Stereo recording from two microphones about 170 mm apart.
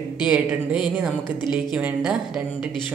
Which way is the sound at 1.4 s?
25° left (ahead or behind).